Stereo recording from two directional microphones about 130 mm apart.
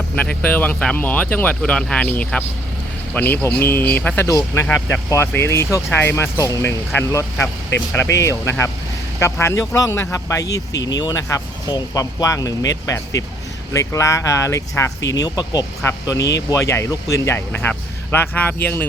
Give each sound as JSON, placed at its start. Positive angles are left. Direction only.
{"t": 0.2, "sound": "speech", "side_deg": 10}
{"t": 4.3, "sound": "speech", "side_deg": 25}
{"t": 4.6, "sound": "speech", "side_deg": 15}